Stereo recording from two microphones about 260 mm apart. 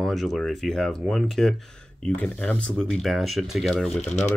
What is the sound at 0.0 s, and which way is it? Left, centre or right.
Speech, centre.